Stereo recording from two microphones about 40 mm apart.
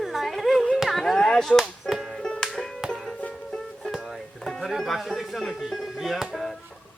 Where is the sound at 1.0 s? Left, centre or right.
Centre.